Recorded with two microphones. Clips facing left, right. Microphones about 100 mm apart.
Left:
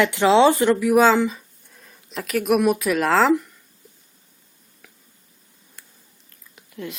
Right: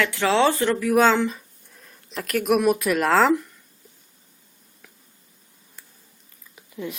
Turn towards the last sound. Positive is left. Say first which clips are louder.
# right 1 dB
turn(degrees=-5)  # may be behind; listen again after turning